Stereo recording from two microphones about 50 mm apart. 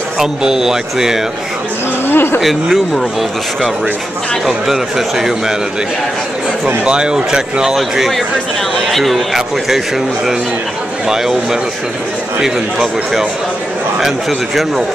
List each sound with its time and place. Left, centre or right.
0.2 s speech: centre
2.0 s speech: left
2.4 s a man's voice: centre
4.5 s speech: centre
6.8 s a man's voice: centre
12.4 s speech: centre